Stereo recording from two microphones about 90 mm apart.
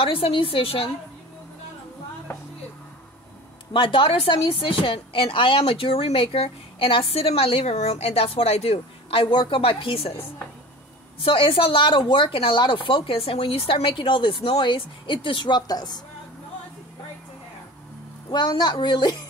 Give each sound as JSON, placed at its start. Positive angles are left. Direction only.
{"t": 0.0, "sound": "a woman's voice", "side_deg": 80}
{"t": 3.7, "sound": "a woman's voice", "side_deg": 70}
{"t": 9.1, "sound": "a woman's voice", "side_deg": 70}
{"t": 18.3, "sound": "a woman's voice", "side_deg": 55}